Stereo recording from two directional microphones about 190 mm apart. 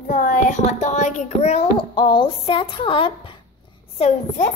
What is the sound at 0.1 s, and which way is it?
A woman's voice, 40° left (ahead or behind).